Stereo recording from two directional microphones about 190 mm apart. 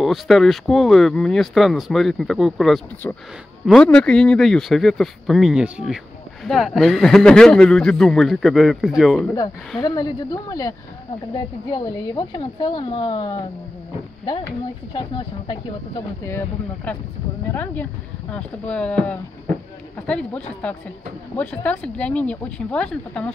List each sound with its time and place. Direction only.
0.0 s speech: centre (ahead or behind)
9.8 s a woman's voice: 20° left (ahead or behind)
16.3 s speech: 10° left (ahead or behind)